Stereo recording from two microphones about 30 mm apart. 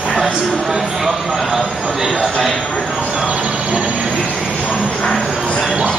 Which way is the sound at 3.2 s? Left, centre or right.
Right.